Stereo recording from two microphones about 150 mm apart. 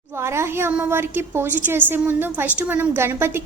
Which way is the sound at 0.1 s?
15° right (ahead or behind).